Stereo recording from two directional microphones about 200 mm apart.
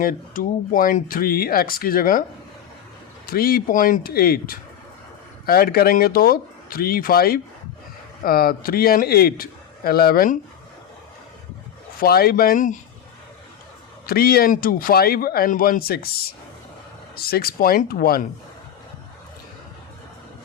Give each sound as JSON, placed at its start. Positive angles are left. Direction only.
{"t": 0.0, "sound": "speech", "side_deg": 45}
{"t": 3.2, "sound": "speech", "side_deg": 50}
{"t": 11.9, "sound": "speech", "side_deg": 50}
{"t": 14.1, "sound": "speech", "side_deg": 50}
{"t": 17.2, "sound": "speech", "side_deg": 50}